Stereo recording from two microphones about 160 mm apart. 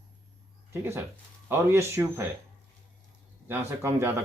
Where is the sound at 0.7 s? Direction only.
15° right (ahead or behind).